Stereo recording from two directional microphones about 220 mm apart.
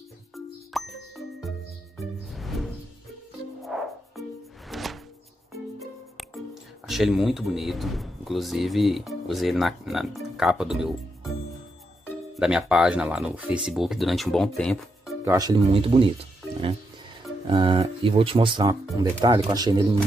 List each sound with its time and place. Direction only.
0.7 s ding: centre (ahead or behind)
2.0 s music: centre (ahead or behind)
5.8 s speech: centre (ahead or behind)
12.4 s speech: 5° right (ahead or behind)
15.2 s speech: 15° right (ahead or behind)
17.5 s speech: 25° right (ahead or behind)